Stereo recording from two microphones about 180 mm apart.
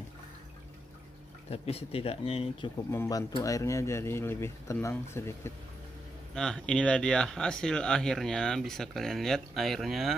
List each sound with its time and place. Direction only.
1.5 s speech: 35° left (ahead or behind)
2.9 s speech: 15° left (ahead or behind)
6.3 s speech: 5° left (ahead or behind)